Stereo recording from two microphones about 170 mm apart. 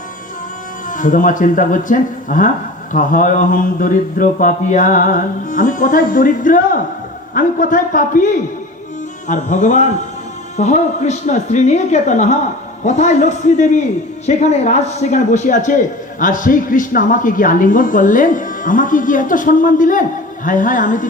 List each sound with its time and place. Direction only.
0.9 s a man's voice: 50° left (ahead or behind)